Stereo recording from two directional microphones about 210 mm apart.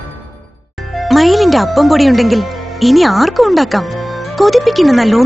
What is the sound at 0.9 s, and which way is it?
A woman's voice, centre (ahead or behind).